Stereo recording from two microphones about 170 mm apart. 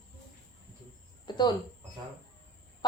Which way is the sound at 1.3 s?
25° left (ahead or behind).